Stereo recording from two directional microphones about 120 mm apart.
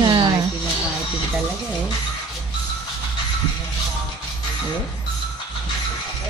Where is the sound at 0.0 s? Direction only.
35° right (ahead or behind).